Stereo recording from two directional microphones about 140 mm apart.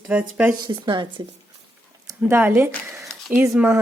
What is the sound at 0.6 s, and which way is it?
Speech, 35° right (ahead or behind).